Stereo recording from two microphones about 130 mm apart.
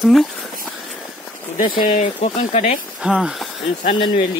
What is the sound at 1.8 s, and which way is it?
Speech, 75° left (ahead or behind).